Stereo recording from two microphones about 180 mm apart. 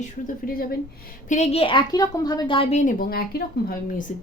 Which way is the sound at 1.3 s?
35° left (ahead or behind).